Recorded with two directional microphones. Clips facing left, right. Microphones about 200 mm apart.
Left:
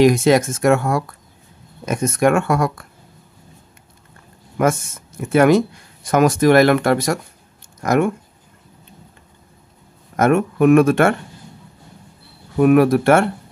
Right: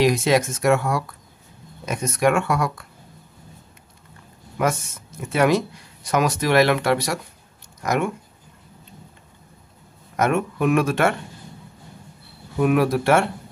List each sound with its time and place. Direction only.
0.0 s speech: 50° left (ahead or behind)
5.3 s speech: 50° left (ahead or behind)
10.1 s speech: 50° left (ahead or behind)
12.5 s speech: 50° left (ahead or behind)